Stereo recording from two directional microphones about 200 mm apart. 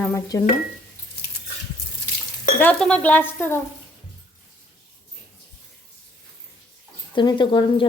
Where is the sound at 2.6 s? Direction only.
5° left (ahead or behind).